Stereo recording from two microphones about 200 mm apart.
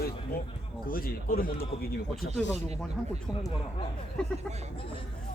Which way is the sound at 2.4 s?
5° left (ahead or behind).